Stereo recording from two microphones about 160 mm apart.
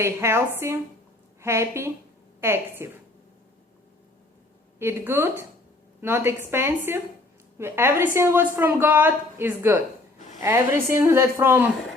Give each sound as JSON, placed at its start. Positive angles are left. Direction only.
{"t": 0.0, "sound": "a woman's voice", "side_deg": -15}
{"t": 4.8, "sound": "a woman's voice", "side_deg": -15}